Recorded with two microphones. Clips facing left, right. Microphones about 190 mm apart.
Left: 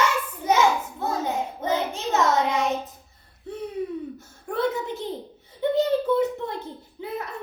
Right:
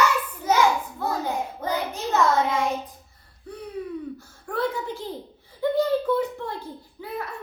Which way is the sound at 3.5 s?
25° left (ahead or behind).